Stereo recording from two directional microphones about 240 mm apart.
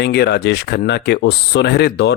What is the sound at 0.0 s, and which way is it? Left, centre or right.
Speech, left.